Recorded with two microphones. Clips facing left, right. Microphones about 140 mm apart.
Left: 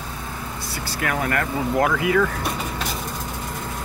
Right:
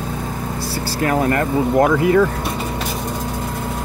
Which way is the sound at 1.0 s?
30° right (ahead or behind).